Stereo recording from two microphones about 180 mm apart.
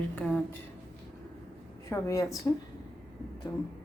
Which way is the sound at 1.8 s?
15° left (ahead or behind).